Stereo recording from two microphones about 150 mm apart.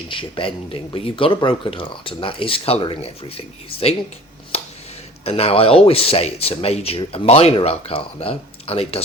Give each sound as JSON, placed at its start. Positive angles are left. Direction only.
{"t": 0.1, "sound": "speech", "side_deg": 35}
{"t": 5.2, "sound": "speech", "side_deg": 40}